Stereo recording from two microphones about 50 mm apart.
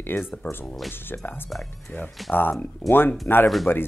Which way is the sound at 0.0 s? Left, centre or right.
Left.